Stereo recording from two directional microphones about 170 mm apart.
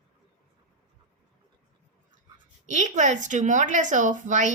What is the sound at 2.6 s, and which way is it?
A woman's voice, 45° right (ahead or behind).